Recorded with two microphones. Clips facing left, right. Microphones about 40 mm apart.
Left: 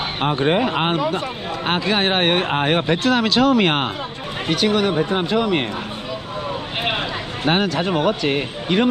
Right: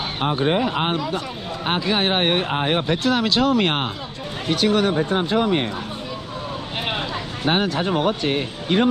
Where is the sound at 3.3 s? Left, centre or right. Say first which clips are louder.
Left 4 dB; left.